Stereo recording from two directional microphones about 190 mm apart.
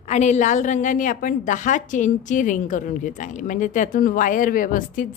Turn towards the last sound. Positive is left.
turn(degrees=45)  # may be behind; listen again after turning